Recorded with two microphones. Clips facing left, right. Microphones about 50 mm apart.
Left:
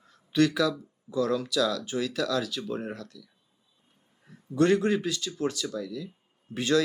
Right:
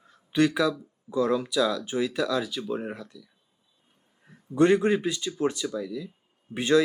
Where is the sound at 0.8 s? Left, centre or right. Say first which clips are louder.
Right 2 dB; centre.